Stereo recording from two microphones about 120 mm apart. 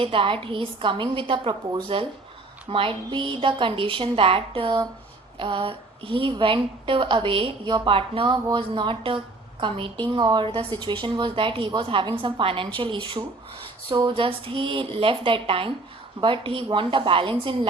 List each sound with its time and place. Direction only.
0.0 s a woman's voice: 50° right (ahead or behind)